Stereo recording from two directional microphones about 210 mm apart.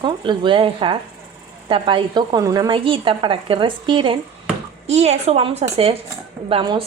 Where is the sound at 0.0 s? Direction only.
20° right (ahead or behind).